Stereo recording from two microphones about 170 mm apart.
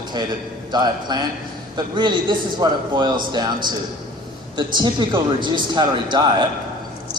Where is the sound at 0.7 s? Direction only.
25° right (ahead or behind).